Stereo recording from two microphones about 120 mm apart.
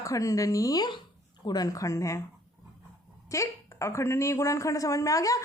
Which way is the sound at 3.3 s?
25° left (ahead or behind).